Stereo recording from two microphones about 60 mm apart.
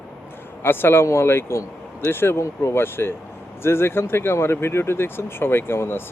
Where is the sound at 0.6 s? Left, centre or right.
Left.